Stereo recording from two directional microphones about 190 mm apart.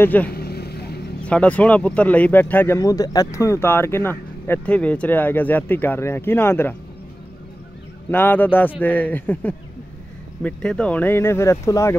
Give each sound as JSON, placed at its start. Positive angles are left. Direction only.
{"t": 0.0, "sound": "speech", "side_deg": 10}
{"t": 0.3, "sound": "vehicle", "side_deg": 55}
{"t": 1.2, "sound": "speech", "side_deg": 5}
{"t": 8.1, "sound": "speech", "side_deg": 10}